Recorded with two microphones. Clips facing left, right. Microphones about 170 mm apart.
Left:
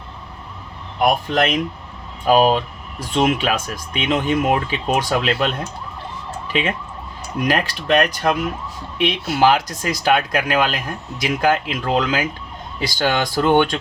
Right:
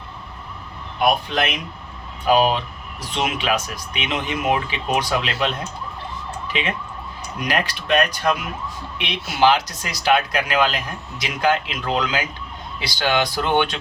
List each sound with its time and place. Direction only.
1.3 s speech: 45° left (ahead or behind)
6.5 s speech: 40° left (ahead or behind)